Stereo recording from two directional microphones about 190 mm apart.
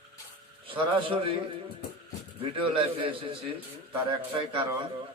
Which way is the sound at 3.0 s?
25° right (ahead or behind).